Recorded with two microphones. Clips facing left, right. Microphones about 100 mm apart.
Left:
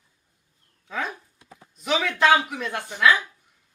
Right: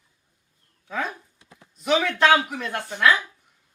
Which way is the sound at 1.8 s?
Centre (ahead or behind).